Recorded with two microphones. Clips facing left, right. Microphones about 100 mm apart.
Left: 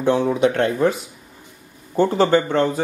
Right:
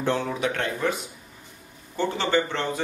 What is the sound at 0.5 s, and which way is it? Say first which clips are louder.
Speech: left 8 dB; 35° left (ahead or behind).